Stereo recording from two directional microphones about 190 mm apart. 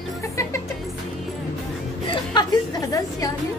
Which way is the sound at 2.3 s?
20° left (ahead or behind).